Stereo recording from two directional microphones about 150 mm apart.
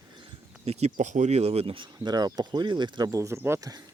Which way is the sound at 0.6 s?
45° right (ahead or behind).